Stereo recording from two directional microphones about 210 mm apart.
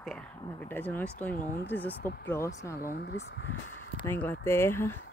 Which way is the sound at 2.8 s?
40° left (ahead or behind).